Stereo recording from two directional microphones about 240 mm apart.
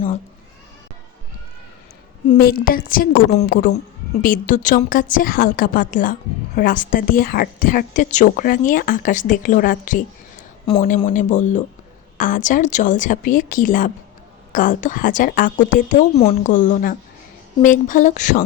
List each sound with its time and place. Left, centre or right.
2.3 s speech: left